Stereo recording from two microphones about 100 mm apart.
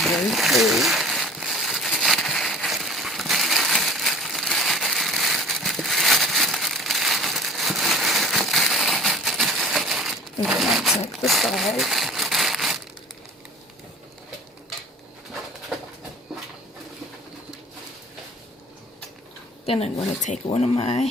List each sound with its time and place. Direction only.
0.0 s crumpling: centre (ahead or behind)
19.6 s a woman's voice: 85° left